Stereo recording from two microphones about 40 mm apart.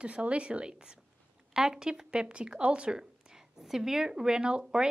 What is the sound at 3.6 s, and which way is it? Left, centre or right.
A woman's voice, centre.